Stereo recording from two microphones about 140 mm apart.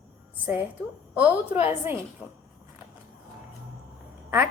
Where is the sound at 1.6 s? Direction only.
15° right (ahead or behind).